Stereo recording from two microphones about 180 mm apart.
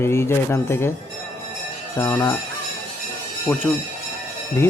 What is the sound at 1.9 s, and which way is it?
Speech, 15° left (ahead or behind).